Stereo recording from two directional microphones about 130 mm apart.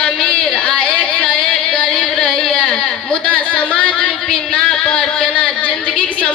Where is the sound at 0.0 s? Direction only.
5° left (ahead or behind).